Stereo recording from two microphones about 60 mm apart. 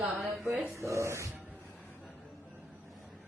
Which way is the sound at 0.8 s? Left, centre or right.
Right.